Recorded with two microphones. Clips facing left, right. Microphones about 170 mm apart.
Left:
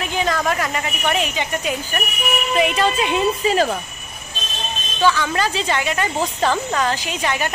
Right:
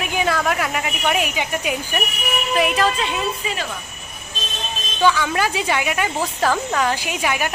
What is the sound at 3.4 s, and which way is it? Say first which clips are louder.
Speech: left 9 dB; 40° left (ahead or behind).